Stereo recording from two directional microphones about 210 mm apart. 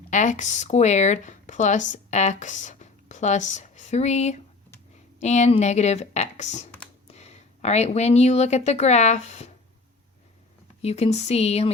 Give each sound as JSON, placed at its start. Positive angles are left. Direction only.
{"t": 0.1, "sound": "a woman's voice", "side_deg": 35}
{"t": 10.8, "sound": "a woman's voice", "side_deg": 30}